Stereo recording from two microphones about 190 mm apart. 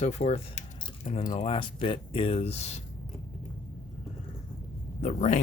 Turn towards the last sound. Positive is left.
turn(degrees=40)  # may be behind; listen again after turning